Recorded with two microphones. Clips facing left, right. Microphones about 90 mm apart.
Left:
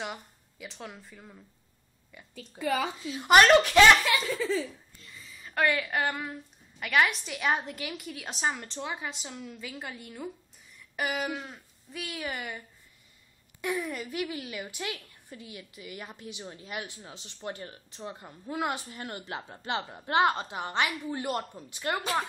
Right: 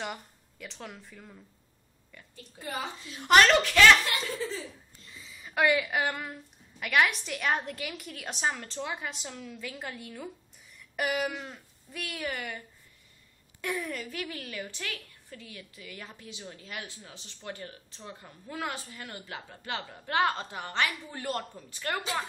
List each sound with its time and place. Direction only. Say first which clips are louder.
0.0 s a woman's voice: even; centre (ahead or behind); by 4.0 s 20° left (ahead or behind)
4.0 s speech: left 4 dB; 90° left
5.3 s a woman's voice: right 2 dB; 5° right (ahead or behind); by 22.0 s 20° left (ahead or behind)